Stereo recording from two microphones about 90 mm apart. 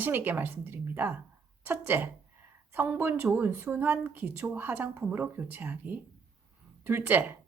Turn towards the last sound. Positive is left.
turn(degrees=-20)  # may be behind; listen again after turning